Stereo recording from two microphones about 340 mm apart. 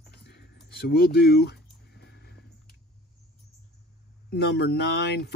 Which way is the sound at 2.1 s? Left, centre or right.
Left.